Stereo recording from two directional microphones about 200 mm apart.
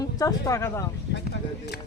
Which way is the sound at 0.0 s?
20° left (ahead or behind).